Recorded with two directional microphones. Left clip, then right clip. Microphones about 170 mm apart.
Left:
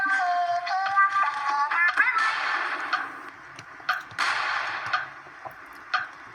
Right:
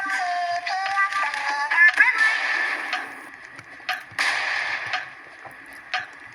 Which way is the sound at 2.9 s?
25° right (ahead or behind).